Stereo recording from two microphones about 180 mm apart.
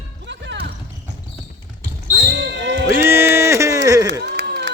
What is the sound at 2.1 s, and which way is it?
Basketball bounce, 65° right (ahead or behind).